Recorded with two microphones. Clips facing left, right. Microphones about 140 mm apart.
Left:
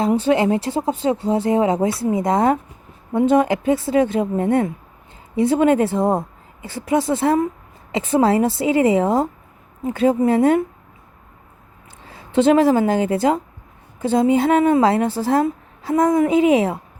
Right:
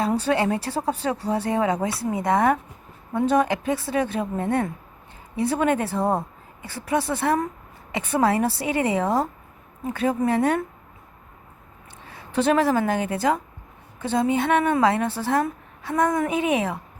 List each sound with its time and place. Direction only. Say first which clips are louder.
0.0 s a woman's voice: left 5 dB; 20° left (ahead or behind)
12.0 s a woman's voice: left 6 dB; 25° left (ahead or behind)